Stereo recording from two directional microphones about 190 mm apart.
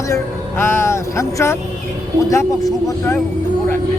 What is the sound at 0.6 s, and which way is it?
Speech, 15° left (ahead or behind).